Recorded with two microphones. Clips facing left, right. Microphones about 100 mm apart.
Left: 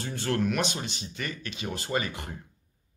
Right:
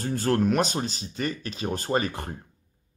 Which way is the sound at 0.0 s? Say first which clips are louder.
Right 5 dB; 40° right (ahead or behind).